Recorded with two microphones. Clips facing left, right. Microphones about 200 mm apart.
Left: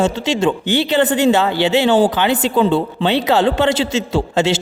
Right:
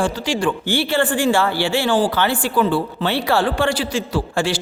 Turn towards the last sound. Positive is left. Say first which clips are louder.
# left 4 dB
turn(degrees=25)  # may be behind; listen again after turning